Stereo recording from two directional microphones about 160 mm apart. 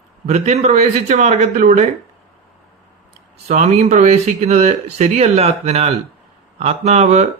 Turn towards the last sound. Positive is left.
turn(degrees=-45)  # may be behind; listen again after turning